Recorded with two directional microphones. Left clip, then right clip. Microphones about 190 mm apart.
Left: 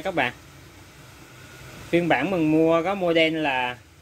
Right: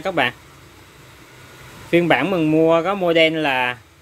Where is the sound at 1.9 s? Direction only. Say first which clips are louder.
Right 5 dB; 25° right (ahead or behind).